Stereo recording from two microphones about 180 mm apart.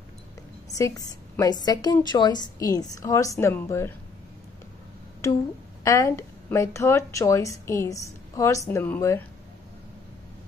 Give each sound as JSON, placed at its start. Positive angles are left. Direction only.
{"t": 0.7, "sound": "a woman's voice", "side_deg": 20}
{"t": 5.9, "sound": "a woman's voice", "side_deg": 15}